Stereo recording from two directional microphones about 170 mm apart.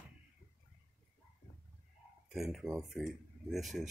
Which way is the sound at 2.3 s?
Centre (ahead or behind).